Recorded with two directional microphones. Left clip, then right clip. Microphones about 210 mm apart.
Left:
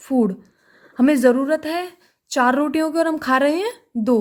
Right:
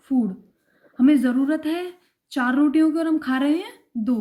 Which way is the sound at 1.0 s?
50° left (ahead or behind).